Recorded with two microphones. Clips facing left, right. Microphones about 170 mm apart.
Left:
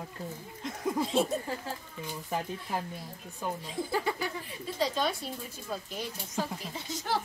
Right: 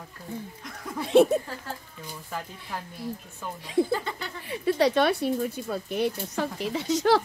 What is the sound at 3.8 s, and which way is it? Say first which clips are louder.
Speech: right 7 dB; 75° right (ahead or behind).